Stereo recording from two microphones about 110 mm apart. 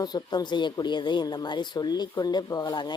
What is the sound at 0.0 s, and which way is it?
Speech, 40° left (ahead or behind).